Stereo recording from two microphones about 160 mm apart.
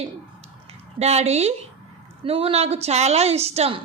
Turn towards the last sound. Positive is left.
turn(degrees=-40)  # may be behind; listen again after turning